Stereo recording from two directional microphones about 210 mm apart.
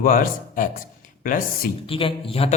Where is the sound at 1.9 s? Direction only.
25° left (ahead or behind).